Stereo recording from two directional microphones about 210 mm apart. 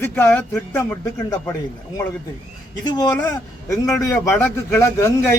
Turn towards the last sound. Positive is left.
turn(degrees=15)  # may be behind; listen again after turning